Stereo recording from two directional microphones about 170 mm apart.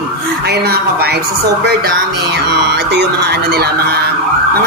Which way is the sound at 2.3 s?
80° right.